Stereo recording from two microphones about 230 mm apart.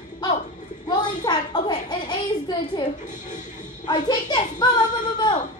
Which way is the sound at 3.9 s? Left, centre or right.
Centre.